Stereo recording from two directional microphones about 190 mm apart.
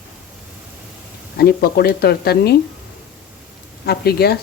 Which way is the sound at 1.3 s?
55° left (ahead or behind).